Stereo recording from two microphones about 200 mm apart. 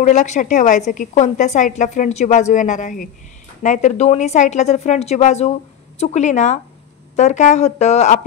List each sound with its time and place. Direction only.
0.0 s a woman's voice: 35° left (ahead or behind)